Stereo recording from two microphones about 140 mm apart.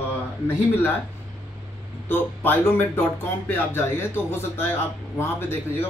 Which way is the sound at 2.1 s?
15° left (ahead or behind).